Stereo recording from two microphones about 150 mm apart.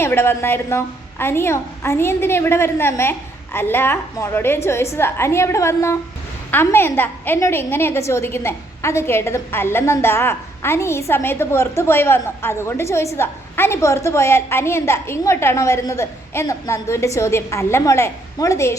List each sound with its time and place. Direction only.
0.0 s a woman's voice: 15° left (ahead or behind)